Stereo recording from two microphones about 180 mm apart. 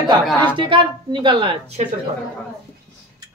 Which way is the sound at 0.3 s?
10° left (ahead or behind).